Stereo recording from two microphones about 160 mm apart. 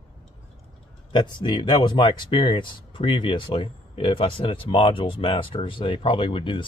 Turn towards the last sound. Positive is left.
turn(degrees=35)  # may be behind; listen again after turning